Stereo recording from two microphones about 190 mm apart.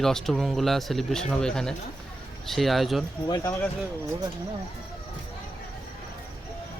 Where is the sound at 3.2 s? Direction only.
20° left (ahead or behind).